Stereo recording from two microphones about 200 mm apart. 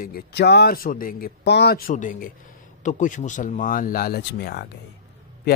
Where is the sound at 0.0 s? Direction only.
50° left (ahead or behind).